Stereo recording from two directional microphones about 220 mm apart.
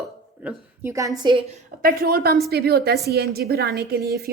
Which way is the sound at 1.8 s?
45° right (ahead or behind).